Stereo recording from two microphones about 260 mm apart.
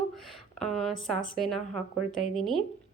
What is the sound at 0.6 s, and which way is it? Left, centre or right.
A woman's voice, centre.